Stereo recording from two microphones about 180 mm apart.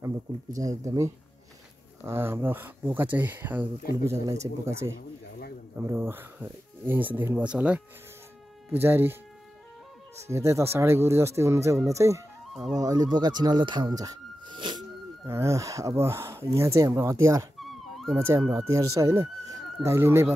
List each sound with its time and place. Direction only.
0.0 s speech: 20° right (ahead or behind)
10.1 s speech: 15° right (ahead or behind)
17.6 s a sound: centre (ahead or behind)
18.1 s speech: 10° right (ahead or behind)